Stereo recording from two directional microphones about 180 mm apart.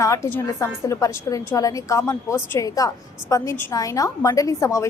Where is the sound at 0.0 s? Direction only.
15° left (ahead or behind).